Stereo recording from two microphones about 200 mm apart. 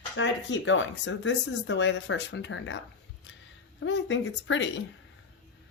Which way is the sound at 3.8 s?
65° left (ahead or behind).